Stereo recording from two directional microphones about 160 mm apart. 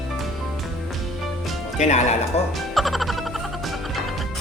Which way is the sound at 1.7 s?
45° left (ahead or behind).